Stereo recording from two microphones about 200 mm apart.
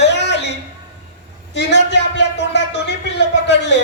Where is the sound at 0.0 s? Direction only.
60° left (ahead or behind).